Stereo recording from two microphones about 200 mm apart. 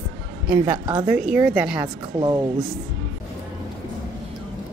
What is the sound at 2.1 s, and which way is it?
Speech, 25° right (ahead or behind).